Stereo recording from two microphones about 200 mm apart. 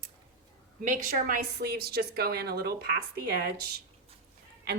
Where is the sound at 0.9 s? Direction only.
45° right (ahead or behind).